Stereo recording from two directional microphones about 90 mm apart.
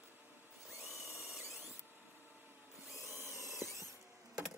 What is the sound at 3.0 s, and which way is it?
Drill, 30° right (ahead or behind).